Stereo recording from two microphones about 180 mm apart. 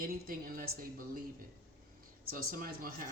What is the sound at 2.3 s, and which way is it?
Speech, 55° right (ahead or behind).